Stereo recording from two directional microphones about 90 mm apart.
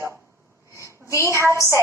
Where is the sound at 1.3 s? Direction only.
30° right (ahead or behind).